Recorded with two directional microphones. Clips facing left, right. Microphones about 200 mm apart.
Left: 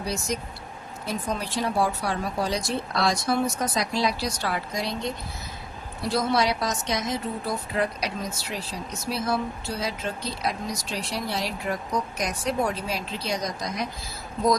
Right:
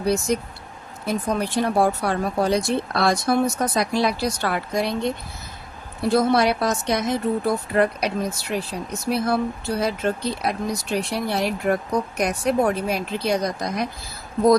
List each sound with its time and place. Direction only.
0.0 s a woman's voice: 55° right (ahead or behind)